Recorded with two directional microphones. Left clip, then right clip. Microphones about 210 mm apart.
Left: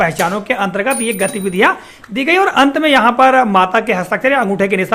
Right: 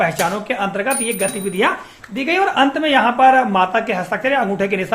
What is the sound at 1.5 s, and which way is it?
A man's voice, 35° left (ahead or behind).